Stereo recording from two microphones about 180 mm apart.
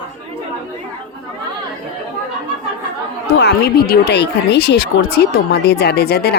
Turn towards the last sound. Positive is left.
turn(degrees=65)  # may be behind; listen again after turning